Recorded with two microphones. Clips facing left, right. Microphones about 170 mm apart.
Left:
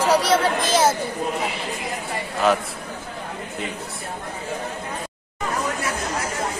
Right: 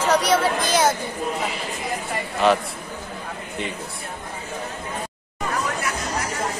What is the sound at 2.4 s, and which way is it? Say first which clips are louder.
Speech: right 1 dB; centre (ahead or behind).